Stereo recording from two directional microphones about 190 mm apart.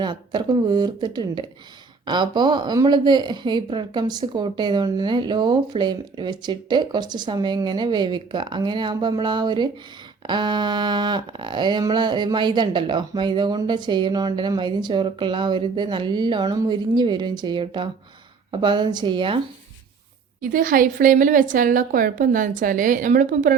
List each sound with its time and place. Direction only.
0.0 s a woman's voice: 25° right (ahead or behind)
20.4 s a woman's voice: 45° right (ahead or behind)